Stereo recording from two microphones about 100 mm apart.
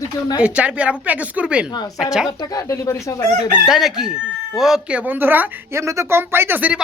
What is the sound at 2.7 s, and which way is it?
Speech, 30° left (ahead or behind).